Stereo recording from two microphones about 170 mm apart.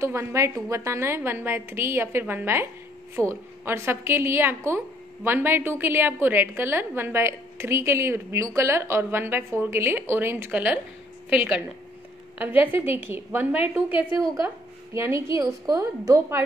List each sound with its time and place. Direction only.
0.0 s a woman's voice: 15° right (ahead or behind)